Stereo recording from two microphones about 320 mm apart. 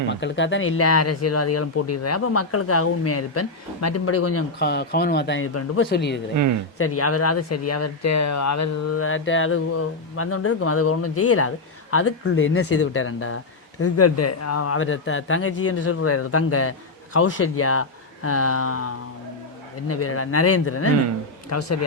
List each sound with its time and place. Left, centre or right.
0.1 s speech: left
4.6 s speech: left
6.7 s speech: left